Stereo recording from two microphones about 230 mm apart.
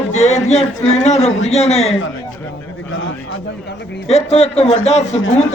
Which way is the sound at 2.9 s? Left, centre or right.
Left.